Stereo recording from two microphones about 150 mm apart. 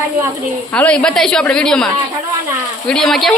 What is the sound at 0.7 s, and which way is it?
A woman's voice, 5° left (ahead or behind).